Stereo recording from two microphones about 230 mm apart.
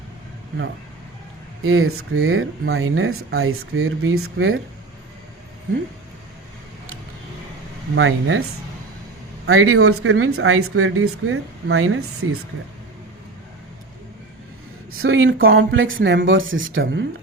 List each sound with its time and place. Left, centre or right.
1.6 s speech: right
7.9 s speech: right
9.5 s speech: right
14.9 s speech: right